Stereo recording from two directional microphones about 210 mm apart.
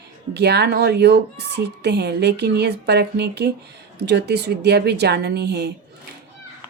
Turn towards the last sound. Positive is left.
turn(degrees=-55)  # may be behind; listen again after turning